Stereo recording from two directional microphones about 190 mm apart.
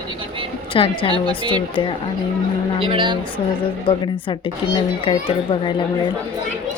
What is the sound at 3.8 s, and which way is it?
A woman's voice, 25° left (ahead or behind).